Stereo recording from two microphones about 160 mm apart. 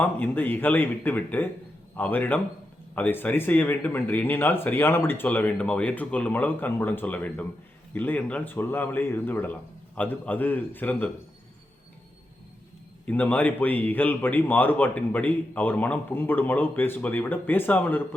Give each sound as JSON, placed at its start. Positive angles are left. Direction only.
{"t": 0.0, "sound": "speech", "side_deg": 10}
{"t": 13.1, "sound": "speech", "side_deg": 10}